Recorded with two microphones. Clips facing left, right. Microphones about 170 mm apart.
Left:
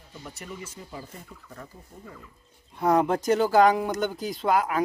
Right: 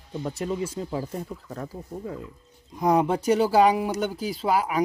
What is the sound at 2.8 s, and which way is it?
Speech, 10° right (ahead or behind).